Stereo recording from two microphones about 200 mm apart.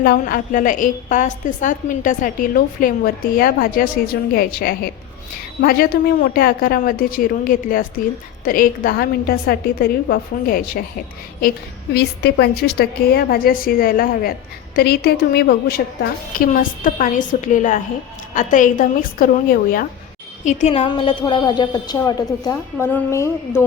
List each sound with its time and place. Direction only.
0.0 s a woman's voice: 45° left (ahead or behind)
11.9 s a woman's voice: 55° left (ahead or behind); by 23.6 s 15° left (ahead or behind)